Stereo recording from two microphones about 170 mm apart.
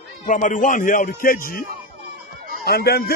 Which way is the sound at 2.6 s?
65° left (ahead or behind).